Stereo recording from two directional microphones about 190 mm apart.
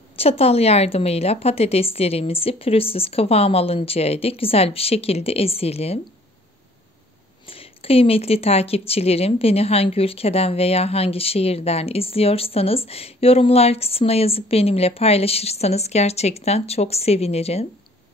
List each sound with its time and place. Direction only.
0.1 s speech: 30° left (ahead or behind)
7.4 s speech: 30° left (ahead or behind)